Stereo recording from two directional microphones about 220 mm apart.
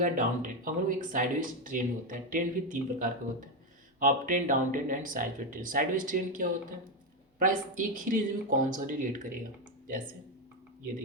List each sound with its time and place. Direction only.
0.0 s speech: 35° right (ahead or behind)